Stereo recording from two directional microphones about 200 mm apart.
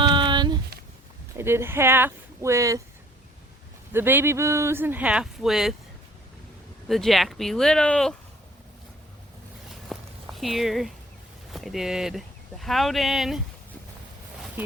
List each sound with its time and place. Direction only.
0.0 s a sound: 25° right (ahead or behind)
1.4 s speech: 10° right (ahead or behind)
3.9 s speech: 10° right (ahead or behind)
6.8 s speech: centre (ahead or behind)
9.9 s walk: centre (ahead or behind)
11.5 s speech: centre (ahead or behind)